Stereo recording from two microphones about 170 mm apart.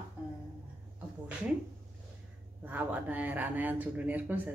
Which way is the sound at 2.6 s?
10° right (ahead or behind).